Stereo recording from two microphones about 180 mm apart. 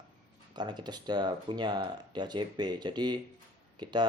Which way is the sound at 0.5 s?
25° right (ahead or behind).